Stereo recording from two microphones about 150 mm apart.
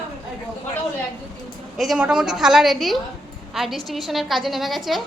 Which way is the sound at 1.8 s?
5° right (ahead or behind).